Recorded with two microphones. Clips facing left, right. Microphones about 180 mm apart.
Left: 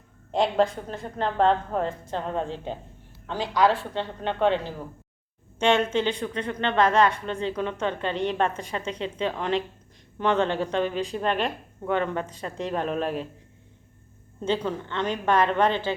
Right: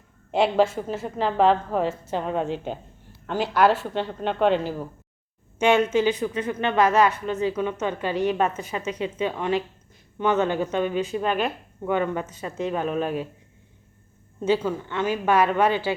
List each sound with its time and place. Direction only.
0.3 s a woman's voice: 5° right (ahead or behind)
14.4 s a woman's voice: 5° right (ahead or behind)